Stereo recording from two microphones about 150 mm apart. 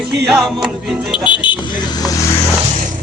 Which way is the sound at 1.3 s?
30° left (ahead or behind).